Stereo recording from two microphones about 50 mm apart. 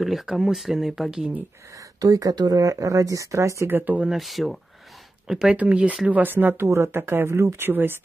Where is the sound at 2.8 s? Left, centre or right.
Right.